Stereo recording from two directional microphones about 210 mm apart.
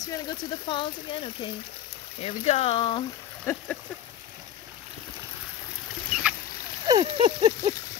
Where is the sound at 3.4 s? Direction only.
10° left (ahead or behind).